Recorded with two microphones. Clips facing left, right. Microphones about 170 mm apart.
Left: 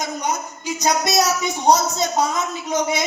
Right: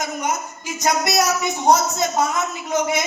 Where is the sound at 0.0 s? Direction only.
20° left (ahead or behind).